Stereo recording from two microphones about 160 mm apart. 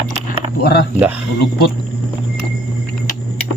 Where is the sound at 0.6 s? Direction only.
90° left.